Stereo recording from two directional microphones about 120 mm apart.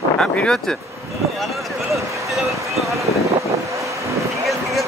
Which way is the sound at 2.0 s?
25° right (ahead or behind).